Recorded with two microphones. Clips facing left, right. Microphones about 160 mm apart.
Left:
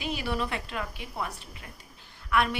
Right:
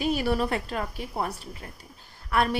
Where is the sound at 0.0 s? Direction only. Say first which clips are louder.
Right 6 dB; 40° right (ahead or behind).